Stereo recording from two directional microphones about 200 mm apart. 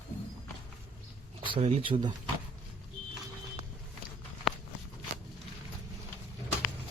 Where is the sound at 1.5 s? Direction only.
30° right (ahead or behind).